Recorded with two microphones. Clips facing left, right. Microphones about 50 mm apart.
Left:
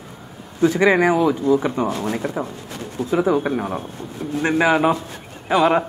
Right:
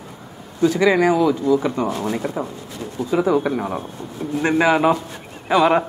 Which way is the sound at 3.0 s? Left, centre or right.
Left.